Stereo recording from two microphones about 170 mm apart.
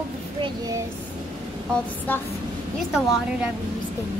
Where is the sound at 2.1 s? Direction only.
10° left (ahead or behind).